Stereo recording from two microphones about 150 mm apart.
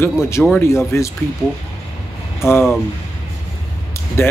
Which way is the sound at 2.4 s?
15° left (ahead or behind).